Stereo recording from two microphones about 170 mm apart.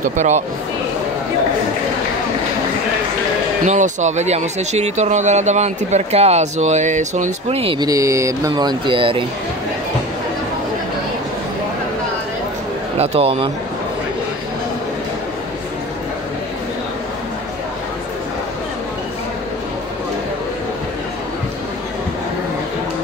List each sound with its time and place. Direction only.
0.0 s speech: 45° right (ahead or behind)
3.6 s speech: 45° right (ahead or behind)
12.9 s speech: 35° right (ahead or behind)